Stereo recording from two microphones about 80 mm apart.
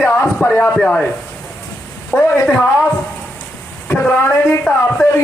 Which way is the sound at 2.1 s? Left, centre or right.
Centre.